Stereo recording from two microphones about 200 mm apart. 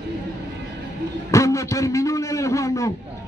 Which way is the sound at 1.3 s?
15° left (ahead or behind).